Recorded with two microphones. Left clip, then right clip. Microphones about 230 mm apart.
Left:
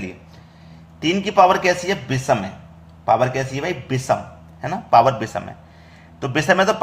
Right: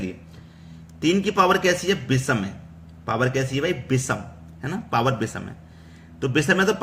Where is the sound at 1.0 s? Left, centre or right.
Centre.